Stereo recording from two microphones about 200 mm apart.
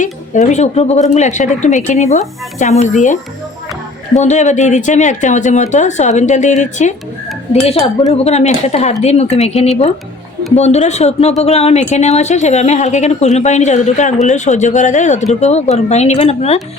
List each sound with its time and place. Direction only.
0.0 s speech: 35° left (ahead or behind)